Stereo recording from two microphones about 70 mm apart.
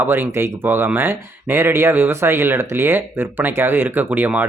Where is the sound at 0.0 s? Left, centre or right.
Right.